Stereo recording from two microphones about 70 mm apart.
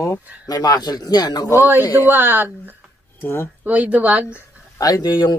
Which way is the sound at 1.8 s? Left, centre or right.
Left.